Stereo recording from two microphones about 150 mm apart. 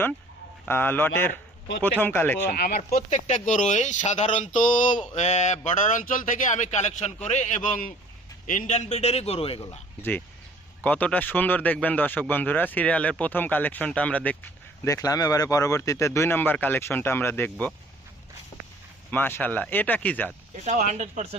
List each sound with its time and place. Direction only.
0.7 s speech: 15° left (ahead or behind)
2.5 s speech: 70° left (ahead or behind)
2.9 s speech: 50° left (ahead or behind)
7.6 s speech: 70° left (ahead or behind)
8.4 s speech: 55° left (ahead or behind); by 9.6 s 40° left (ahead or behind)
10.0 s speech: 10° left (ahead or behind)
14.8 s speech: 20° left (ahead or behind)
18.5 s walk: 25° left (ahead or behind)
19.1 s speech: 15° left (ahead or behind)
20.7 s speech: 50° right (ahead or behind)